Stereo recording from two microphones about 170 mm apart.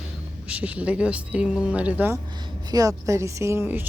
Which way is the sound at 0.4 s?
10° right (ahead or behind).